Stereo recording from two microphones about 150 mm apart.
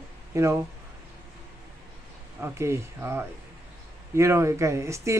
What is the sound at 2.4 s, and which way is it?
Speech, 20° right (ahead or behind).